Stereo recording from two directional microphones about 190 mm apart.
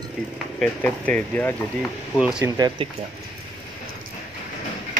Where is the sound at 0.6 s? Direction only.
10° left (ahead or behind).